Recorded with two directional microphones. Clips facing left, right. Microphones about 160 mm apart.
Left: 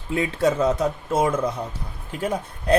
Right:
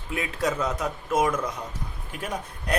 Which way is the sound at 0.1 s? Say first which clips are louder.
Left 6 dB; 30° left (ahead or behind).